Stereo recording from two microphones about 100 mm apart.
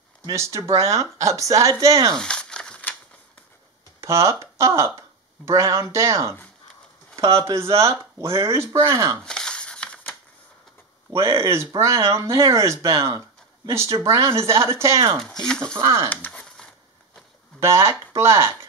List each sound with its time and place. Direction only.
0.2 s speech: 35° right (ahead or behind)
2.1 s crumpling: 10° left (ahead or behind)
4.0 s speech: 30° right (ahead or behind)
9.2 s a sound: 10° left (ahead or behind)
11.1 s speech: 30° right (ahead or behind)
15.1 s speech: 5° left (ahead or behind)
16.1 s a sound: 15° left (ahead or behind)
17.6 s speech: 30° right (ahead or behind)